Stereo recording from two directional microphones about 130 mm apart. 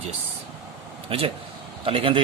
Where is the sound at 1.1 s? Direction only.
45° right (ahead or behind).